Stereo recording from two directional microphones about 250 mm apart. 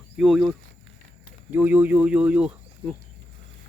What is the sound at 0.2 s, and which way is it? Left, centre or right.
Speech, centre.